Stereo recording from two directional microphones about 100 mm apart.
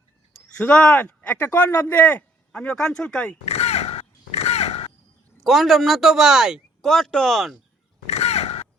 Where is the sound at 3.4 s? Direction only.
90° left.